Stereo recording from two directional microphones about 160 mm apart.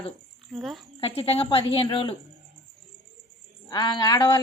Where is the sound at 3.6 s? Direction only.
25° left (ahead or behind).